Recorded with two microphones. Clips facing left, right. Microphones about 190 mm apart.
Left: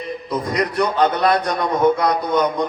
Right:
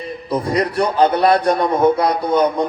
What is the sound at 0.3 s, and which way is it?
A man's voice, 30° right (ahead or behind).